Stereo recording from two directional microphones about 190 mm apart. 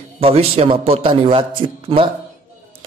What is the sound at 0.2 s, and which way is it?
A man's voice, 30° right (ahead or behind).